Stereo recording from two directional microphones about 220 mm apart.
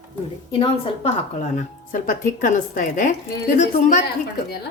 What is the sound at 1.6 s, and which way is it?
Speech, 35° left (ahead or behind).